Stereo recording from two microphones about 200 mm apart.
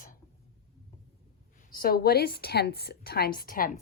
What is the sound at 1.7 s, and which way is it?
A woman's voice, 50° left (ahead or behind).